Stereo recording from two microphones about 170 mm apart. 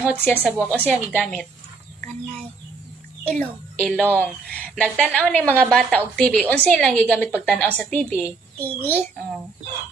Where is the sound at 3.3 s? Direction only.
5° left (ahead or behind).